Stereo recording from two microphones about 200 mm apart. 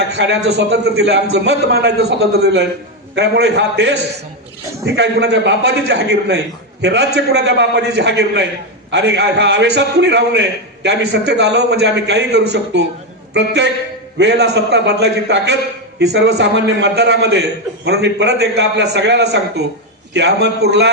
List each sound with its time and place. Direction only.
0.2 s a man's voice: 55° right (ahead or behind)